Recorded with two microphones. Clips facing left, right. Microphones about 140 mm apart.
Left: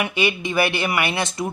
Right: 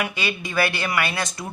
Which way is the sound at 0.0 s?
20° left (ahead or behind).